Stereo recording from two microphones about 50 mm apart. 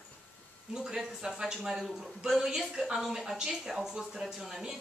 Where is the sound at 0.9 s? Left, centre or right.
Centre.